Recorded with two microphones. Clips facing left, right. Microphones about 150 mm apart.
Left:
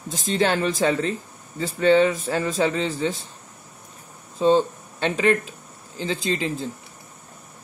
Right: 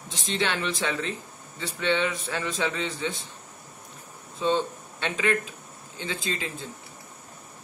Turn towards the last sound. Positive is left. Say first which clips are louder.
# left 7 dB
turn(degrees=35)  # may be behind; listen again after turning